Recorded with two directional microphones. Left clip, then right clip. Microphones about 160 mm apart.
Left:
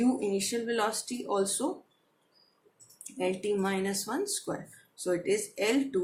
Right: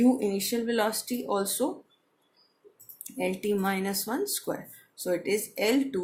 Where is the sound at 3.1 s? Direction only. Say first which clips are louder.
Right 1 dB; 35° right (ahead or behind).